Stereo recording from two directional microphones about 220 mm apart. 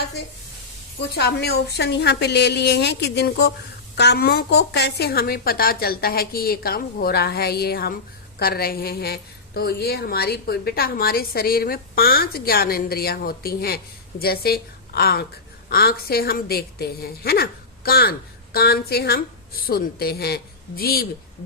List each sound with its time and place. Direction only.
1.1 s a woman's voice: 45° left (ahead or behind)